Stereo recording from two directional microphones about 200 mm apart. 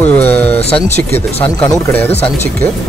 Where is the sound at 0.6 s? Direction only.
30° left (ahead or behind).